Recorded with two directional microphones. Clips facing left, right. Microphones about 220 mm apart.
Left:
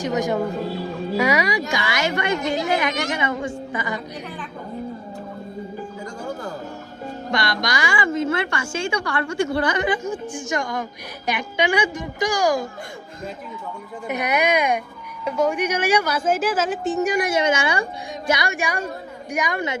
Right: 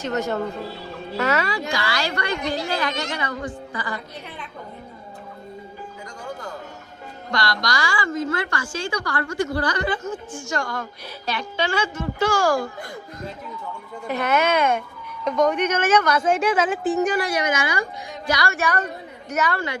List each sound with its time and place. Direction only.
0.0 s a woman's voice: 15° left (ahead or behind)
7.3 s a woman's voice: 20° left (ahead or behind)
14.1 s a woman's voice: 15° left (ahead or behind); by 17.1 s centre (ahead or behind)
17.1 s a woman's voice: 20° left (ahead or behind)